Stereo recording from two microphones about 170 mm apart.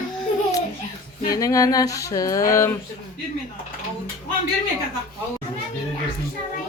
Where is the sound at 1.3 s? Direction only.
20° left (ahead or behind).